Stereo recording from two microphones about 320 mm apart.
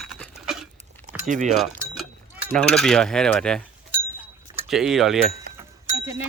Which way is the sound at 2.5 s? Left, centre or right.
Centre.